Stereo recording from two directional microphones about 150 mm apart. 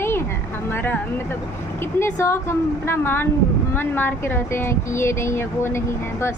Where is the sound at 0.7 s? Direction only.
15° left (ahead or behind).